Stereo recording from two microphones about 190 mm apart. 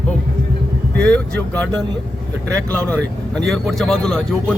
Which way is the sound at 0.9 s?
5° left (ahead or behind).